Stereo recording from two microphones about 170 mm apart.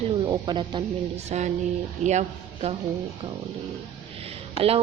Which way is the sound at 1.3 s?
40° right (ahead or behind).